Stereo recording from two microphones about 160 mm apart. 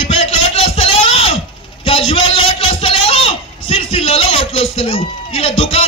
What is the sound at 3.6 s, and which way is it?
Speech, 35° left (ahead or behind).